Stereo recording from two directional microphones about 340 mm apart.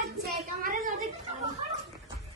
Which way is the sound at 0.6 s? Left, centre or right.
Right.